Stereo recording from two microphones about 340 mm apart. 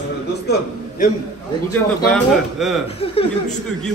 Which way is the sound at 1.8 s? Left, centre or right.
Centre.